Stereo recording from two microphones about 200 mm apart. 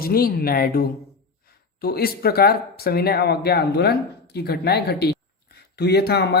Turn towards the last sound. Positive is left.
turn(degrees=55)  # may be behind; listen again after turning